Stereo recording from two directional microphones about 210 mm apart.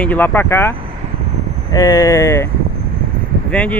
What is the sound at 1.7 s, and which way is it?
Speech, 15° left (ahead or behind).